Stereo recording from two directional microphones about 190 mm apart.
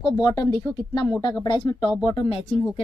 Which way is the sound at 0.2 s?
20° left (ahead or behind).